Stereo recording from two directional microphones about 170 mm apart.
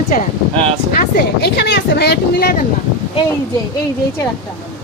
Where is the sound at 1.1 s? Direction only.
75° left (ahead or behind).